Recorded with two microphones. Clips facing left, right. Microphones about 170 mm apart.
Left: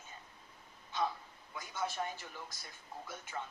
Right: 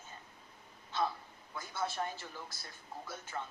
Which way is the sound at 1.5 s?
15° left (ahead or behind).